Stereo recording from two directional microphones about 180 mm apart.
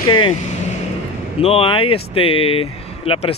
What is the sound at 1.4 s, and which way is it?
Speech, 30° left (ahead or behind).